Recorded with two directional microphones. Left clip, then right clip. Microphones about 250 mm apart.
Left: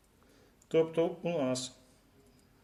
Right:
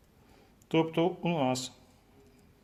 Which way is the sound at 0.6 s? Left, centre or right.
Right.